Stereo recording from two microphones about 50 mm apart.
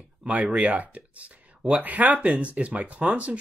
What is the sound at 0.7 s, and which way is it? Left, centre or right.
Speech, right.